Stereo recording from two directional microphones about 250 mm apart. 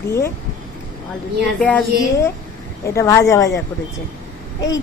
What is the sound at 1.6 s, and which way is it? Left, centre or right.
A woman's voice, centre.